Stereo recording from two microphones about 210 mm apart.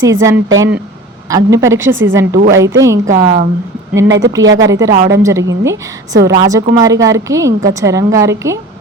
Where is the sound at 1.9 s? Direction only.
65° right (ahead or behind).